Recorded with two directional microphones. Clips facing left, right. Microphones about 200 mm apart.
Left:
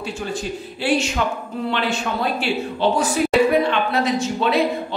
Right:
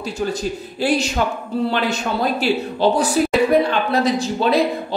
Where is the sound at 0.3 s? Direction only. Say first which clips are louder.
Right 3 dB; 40° right (ahead or behind).